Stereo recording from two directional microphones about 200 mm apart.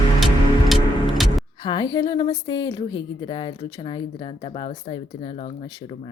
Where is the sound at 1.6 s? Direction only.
20° left (ahead or behind).